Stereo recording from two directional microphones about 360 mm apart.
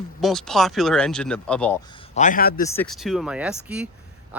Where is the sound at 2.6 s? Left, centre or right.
Centre.